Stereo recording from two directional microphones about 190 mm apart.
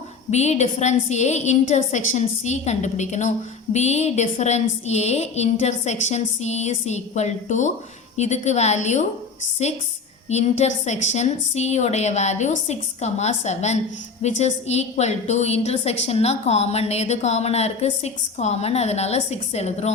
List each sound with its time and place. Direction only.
0.3 s a woman's voice: 35° left (ahead or behind)